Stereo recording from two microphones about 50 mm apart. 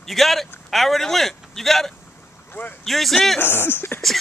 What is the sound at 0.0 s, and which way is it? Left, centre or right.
Speech, centre.